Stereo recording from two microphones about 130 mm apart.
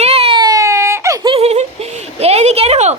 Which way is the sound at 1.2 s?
50° right (ahead or behind).